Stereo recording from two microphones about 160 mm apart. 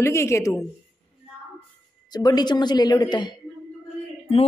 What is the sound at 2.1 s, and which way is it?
A woman's voice, 25° left (ahead or behind).